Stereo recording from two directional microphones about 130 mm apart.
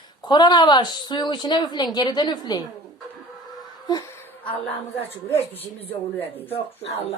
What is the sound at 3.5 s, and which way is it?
Whimper, 30° left (ahead or behind).